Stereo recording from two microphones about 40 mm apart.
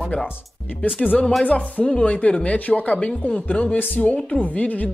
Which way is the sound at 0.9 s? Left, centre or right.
Left.